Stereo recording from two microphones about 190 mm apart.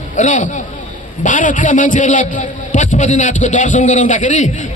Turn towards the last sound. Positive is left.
turn(degrees=40)  # may be behind; listen again after turning